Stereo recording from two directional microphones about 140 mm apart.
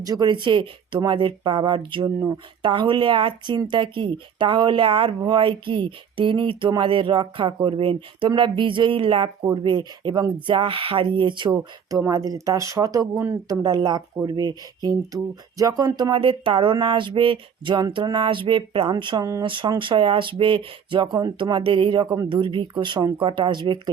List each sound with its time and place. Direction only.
0.0 s speech: 30° right (ahead or behind)